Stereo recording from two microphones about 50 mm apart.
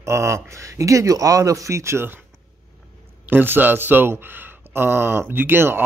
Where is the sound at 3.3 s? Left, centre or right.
Right.